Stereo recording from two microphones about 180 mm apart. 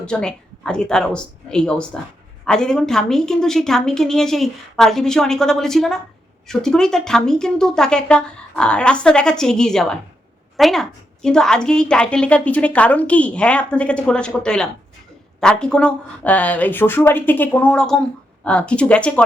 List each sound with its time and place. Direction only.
0.0 s a woman's voice: 5° left (ahead or behind)